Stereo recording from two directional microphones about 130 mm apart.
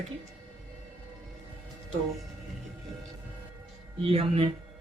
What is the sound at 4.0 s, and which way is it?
Speech, 50° right (ahead or behind).